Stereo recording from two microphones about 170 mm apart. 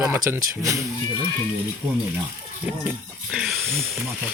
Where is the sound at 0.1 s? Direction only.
15° right (ahead or behind).